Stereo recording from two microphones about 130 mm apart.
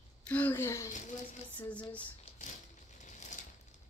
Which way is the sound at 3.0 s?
70° left (ahead or behind).